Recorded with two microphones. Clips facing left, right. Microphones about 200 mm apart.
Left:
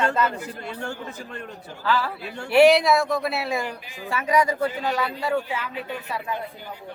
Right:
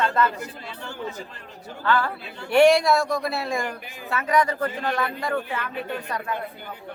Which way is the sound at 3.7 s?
55° right (ahead or behind).